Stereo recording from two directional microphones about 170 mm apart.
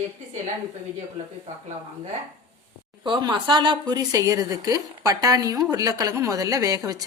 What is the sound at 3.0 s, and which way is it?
A woman's voice, 25° right (ahead or behind).